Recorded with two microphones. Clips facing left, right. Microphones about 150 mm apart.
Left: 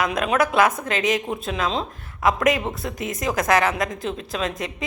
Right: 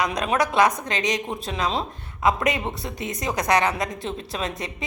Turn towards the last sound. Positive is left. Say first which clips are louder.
# left 3 dB
turn(degrees=0)  # may be behind; listen again after turning